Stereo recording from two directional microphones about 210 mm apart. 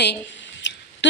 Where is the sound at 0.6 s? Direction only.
55° left (ahead or behind).